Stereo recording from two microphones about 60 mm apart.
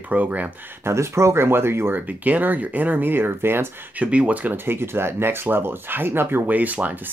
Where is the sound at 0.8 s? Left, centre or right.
Right.